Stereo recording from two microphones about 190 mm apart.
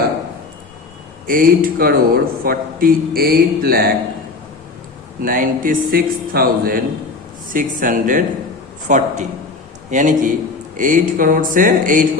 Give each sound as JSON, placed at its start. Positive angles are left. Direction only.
{"t": 1.3, "sound": "a man's voice", "side_deg": -50}
{"t": 5.2, "sound": "a man's voice", "side_deg": -45}